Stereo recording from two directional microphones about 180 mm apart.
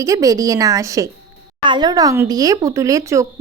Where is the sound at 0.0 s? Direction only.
20° right (ahead or behind).